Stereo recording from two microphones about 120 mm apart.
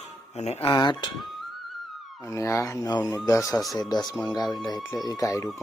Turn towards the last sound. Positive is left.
turn(degrees=30)  # may be behind; listen again after turning